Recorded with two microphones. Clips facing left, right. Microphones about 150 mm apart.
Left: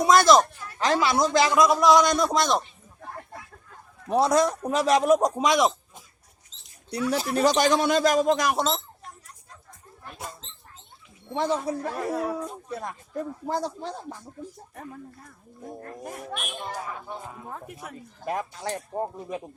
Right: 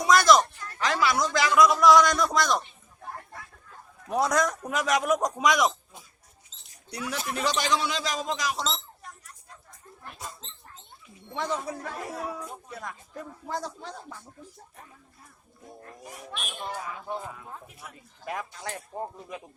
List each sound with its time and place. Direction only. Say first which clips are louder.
0.0 s a sound: left 3 dB; 30° left (ahead or behind)
0.8 s a man's voice: left 3 dB; 30° left (ahead or behind)
4.1 s a man's voice: left 4 dB; 30° left (ahead or behind)
7.1 s speech: left 7 dB; 35° left (ahead or behind); by 8.8 s 55° left (ahead or behind)
11.3 s speech: left 5 dB; 30° left (ahead or behind)
15.8 s speech: left 5 dB; 55° left (ahead or behind)
18.3 s speech: left 5 dB; 35° left (ahead or behind)